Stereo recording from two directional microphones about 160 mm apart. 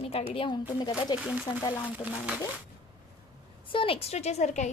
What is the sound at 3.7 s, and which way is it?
A woman's voice, 35° left (ahead or behind).